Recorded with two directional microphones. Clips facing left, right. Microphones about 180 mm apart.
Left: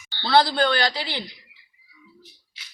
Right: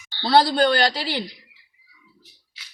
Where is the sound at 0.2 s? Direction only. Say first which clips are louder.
Right 2 dB; 35° right (ahead or behind).